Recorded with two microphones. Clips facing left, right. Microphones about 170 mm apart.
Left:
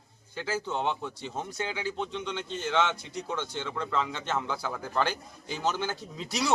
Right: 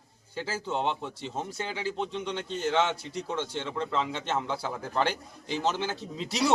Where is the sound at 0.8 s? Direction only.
30° right (ahead or behind).